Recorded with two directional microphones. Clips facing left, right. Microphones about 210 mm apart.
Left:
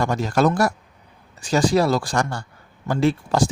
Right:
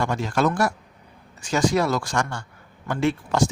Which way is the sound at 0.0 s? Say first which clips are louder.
Left 3 dB; 40° left (ahead or behind).